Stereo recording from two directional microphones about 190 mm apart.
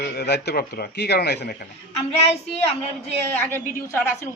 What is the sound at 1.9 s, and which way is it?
Child singing, 35° left (ahead or behind).